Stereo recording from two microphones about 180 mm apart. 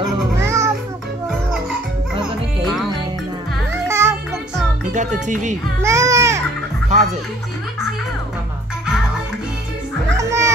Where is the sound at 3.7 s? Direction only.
15° right (ahead or behind).